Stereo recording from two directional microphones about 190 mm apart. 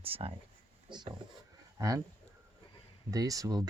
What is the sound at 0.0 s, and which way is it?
Speech, 30° right (ahead or behind).